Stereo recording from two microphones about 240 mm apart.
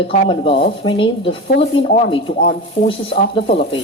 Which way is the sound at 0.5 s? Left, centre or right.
Left.